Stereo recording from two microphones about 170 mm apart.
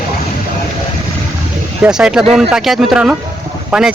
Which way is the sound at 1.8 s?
5° right (ahead or behind).